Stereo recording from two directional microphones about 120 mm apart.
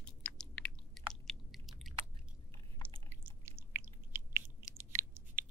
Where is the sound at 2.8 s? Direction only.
15° right (ahead or behind).